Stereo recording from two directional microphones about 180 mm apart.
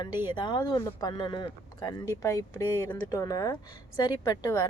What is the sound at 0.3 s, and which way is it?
Speech, 25° left (ahead or behind).